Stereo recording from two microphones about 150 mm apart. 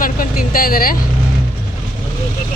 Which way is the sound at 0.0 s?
70° left (ahead or behind).